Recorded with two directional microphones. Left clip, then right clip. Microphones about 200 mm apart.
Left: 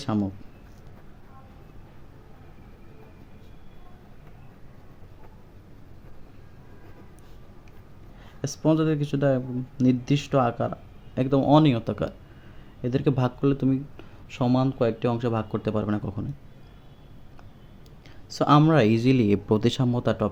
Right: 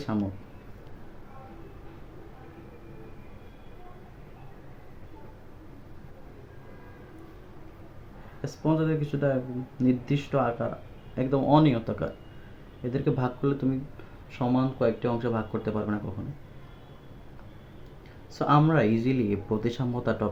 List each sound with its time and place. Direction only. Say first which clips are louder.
8.4 s speech: left 4 dB; 45° left (ahead or behind)
18.3 s speech: left 4 dB; 55° left (ahead or behind)